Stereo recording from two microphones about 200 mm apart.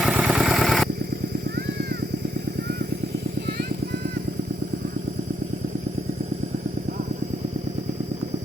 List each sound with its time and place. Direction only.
0.0 s vehicle: 5° right (ahead or behind)
1.5 s vehicle: 55° right (ahead or behind)